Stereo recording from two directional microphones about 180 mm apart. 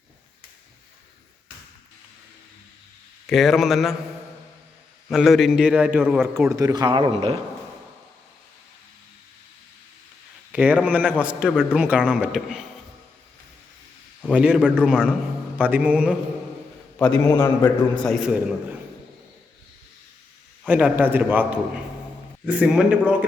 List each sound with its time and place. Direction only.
3.2 s a man's voice: centre (ahead or behind)
5.0 s a man's voice: centre (ahead or behind)
6.5 s speech: 20° right (ahead or behind)
10.5 s a man's voice: 10° right (ahead or behind)
14.3 s a man's voice: 5° right (ahead or behind)
17.0 s a man's voice: 10° left (ahead or behind)
18.0 s a man's voice: centre (ahead or behind)
20.7 s a man's voice: 10° right (ahead or behind)